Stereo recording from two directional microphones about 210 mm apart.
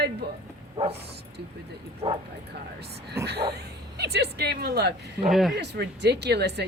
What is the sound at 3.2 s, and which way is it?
Speech, 10° right (ahead or behind).